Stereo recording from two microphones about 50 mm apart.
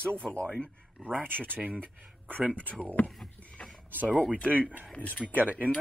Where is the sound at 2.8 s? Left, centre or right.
Left.